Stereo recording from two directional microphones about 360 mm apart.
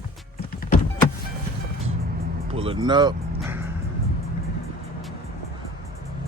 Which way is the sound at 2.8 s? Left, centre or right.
Centre.